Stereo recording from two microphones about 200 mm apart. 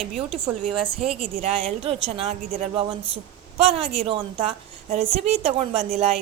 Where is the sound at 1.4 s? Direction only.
30° right (ahead or behind).